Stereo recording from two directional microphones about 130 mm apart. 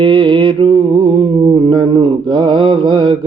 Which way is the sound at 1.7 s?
40° right (ahead or behind).